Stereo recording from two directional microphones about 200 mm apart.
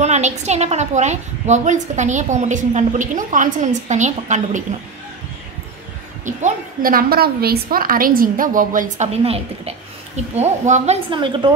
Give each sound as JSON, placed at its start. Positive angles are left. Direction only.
{"t": 0.0, "sound": "a woman's voice", "side_deg": -35}
{"t": 6.2, "sound": "a woman's voice", "side_deg": -40}
{"t": 11.1, "sound": "a woman's voice", "side_deg": -25}